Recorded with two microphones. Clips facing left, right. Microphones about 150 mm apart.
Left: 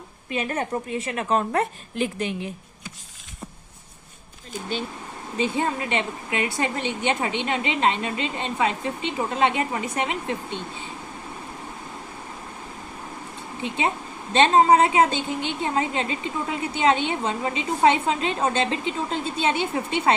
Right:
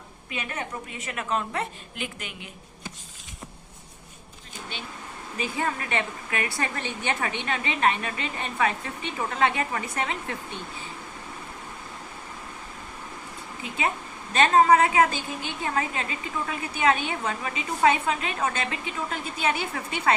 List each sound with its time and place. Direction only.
0.3 s a woman's voice: 40° left (ahead or behind)
5.4 s a woman's voice: 25° left (ahead or behind)
13.6 s a woman's voice: 25° left (ahead or behind)